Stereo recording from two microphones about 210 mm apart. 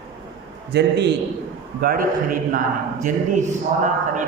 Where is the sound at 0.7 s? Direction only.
55° right (ahead or behind).